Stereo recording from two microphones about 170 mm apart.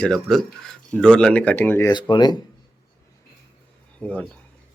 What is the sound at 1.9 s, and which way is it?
Speech, 25° left (ahead or behind).